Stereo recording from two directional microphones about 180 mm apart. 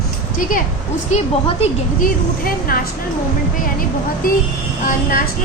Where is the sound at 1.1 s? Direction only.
40° left (ahead or behind).